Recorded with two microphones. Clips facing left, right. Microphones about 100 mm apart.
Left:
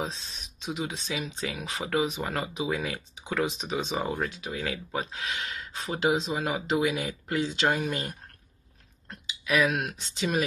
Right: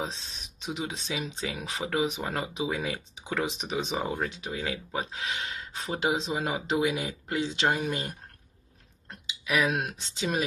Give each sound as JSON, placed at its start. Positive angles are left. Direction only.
{"t": 0.7, "sound": "speech", "side_deg": -25}
{"t": 3.9, "sound": "speech", "side_deg": -5}
{"t": 4.3, "sound": "speech", "side_deg": -20}
{"t": 9.7, "sound": "speech", "side_deg": -20}